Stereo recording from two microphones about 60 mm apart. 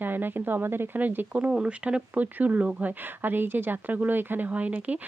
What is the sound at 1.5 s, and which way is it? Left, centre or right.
Speech, centre.